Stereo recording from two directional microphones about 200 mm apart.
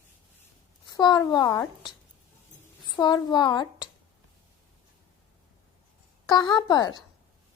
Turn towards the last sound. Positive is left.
turn(degrees=20)  # may be behind; listen again after turning